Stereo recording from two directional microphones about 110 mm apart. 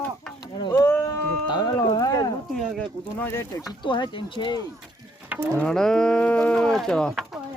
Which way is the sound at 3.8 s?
45° left (ahead or behind).